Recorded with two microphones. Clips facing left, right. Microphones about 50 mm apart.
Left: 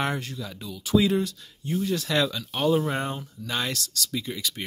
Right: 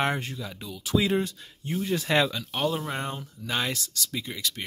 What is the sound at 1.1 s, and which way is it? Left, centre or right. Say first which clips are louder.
Speech: left 1 dB; right.